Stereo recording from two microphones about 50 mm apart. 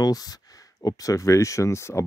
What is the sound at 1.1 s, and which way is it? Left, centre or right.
Speech, left.